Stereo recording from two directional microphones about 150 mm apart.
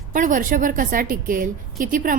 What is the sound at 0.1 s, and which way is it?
A woman's voice, 60° right (ahead or behind).